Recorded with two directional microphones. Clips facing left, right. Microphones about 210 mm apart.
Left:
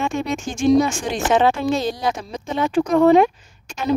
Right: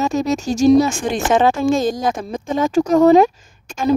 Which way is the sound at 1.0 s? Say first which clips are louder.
Right 2 dB; 50° right (ahead or behind).